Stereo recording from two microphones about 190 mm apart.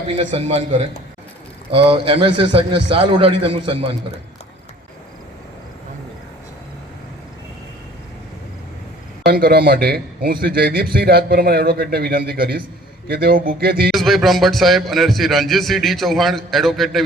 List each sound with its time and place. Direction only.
0.1 s a man's voice: 35° right (ahead or behind)
9.2 s a man's voice: 55° right (ahead or behind)
13.9 s a man's voice: centre (ahead or behind)